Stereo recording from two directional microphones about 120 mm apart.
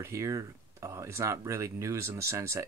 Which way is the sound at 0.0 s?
25° right (ahead or behind).